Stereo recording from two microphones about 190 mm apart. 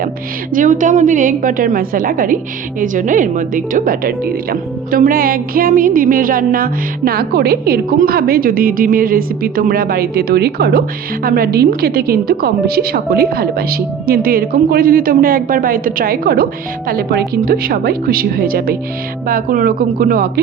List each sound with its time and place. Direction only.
0.5 s music: 45° right (ahead or behind)